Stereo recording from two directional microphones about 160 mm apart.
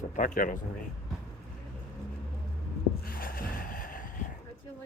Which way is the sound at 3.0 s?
60° left (ahead or behind).